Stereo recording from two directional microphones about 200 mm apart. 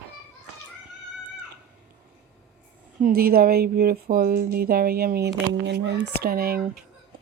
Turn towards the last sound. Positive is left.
turn(degrees=-50)  # may be behind; listen again after turning